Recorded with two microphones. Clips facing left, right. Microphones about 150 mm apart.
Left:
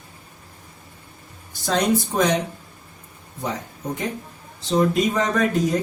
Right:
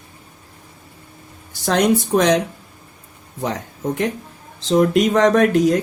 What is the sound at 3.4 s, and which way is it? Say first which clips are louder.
Speech: right 5 dB; 80° right.